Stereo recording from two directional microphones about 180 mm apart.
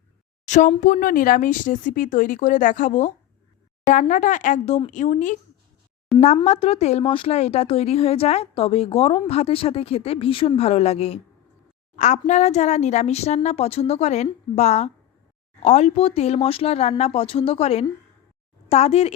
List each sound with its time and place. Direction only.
0.4 s speech: 40° left (ahead or behind)